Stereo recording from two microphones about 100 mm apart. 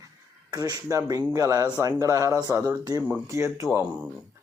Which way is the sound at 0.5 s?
40° right (ahead or behind).